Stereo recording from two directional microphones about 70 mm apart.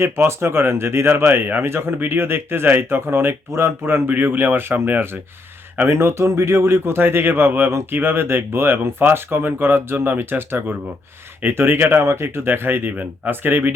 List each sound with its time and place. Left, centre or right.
0.0 s speech: right